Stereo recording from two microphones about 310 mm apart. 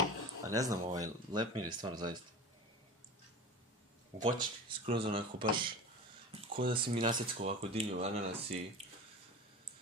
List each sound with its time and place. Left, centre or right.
0.4 s speech: centre
4.4 s speech: centre